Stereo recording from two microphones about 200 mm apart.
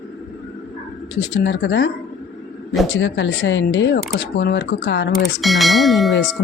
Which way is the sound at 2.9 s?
65° left (ahead or behind).